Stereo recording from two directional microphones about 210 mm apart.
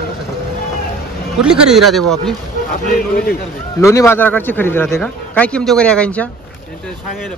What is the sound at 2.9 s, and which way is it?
Speech, 40° left (ahead or behind).